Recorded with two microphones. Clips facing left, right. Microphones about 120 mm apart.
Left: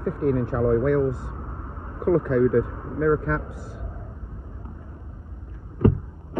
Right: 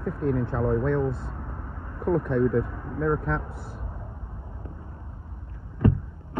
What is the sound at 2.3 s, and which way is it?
Speech, 60° left (ahead or behind).